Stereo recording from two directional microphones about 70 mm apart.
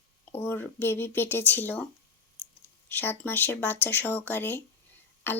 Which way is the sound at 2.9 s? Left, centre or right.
Left.